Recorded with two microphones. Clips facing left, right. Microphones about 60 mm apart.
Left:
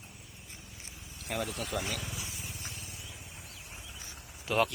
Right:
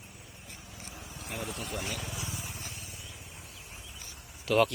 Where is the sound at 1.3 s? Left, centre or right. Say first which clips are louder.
Left 4 dB; left.